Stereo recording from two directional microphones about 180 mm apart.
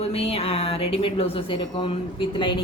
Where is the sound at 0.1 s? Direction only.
35° left (ahead or behind).